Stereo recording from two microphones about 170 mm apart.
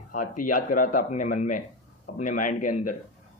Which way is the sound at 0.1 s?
50° left (ahead or behind).